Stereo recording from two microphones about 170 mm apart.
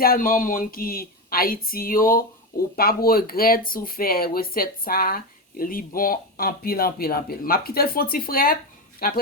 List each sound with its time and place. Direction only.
0.0 s speech: 60° left (ahead or behind)